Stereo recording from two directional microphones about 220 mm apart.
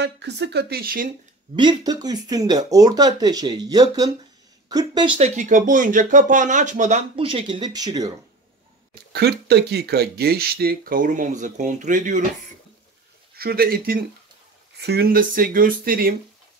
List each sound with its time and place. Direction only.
0.0 s speech: 50° right (ahead or behind)
1.5 s speech: 20° right (ahead or behind)
5.4 s speech: 35° right (ahead or behind); by 8.1 s 15° right (ahead or behind)
9.1 s speech: 45° right (ahead or behind)
13.4 s speech: 45° right (ahead or behind)